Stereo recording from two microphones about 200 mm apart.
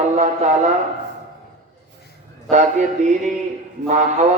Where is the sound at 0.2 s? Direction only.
35° right (ahead or behind).